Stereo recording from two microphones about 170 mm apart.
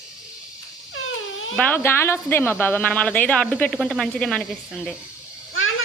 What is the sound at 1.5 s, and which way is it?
A woman's voice, 10° left (ahead or behind).